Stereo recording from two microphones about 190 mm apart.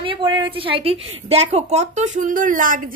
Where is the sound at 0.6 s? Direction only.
30° right (ahead or behind).